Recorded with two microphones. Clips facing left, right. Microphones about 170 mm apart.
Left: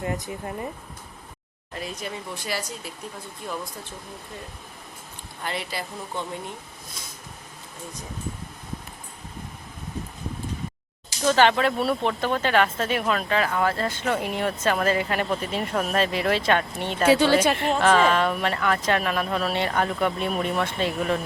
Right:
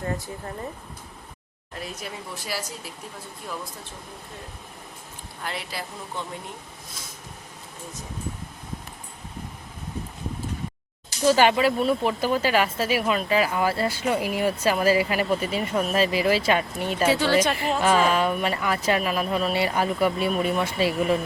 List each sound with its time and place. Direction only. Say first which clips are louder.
0.0 s speech: left 1 dB; 15° left (ahead or behind)
1.7 s speech: left 2 dB; centre (ahead or behind)
5.4 s speech: left 2 dB; centre (ahead or behind)
11.3 s speech: right 1 dB; 10° right (ahead or behind)
17.1 s speech: left 4 dB; 15° left (ahead or behind)
17.5 s speech: left 1 dB; centre (ahead or behind)